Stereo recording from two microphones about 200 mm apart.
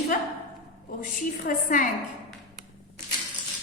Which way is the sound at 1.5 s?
45° left (ahead or behind).